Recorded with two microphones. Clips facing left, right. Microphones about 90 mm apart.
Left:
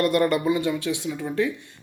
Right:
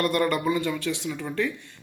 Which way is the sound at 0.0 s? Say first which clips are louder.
Left 3 dB; 25° left (ahead or behind).